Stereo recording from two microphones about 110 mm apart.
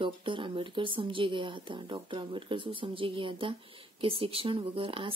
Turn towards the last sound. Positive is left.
turn(degrees=-55)  # may be behind; listen again after turning